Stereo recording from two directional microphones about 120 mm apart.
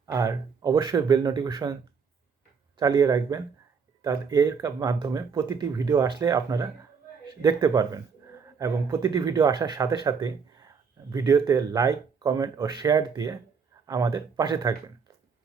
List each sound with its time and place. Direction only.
0.0 s speech: 25° right (ahead or behind)
2.7 s speech: 30° right (ahead or behind)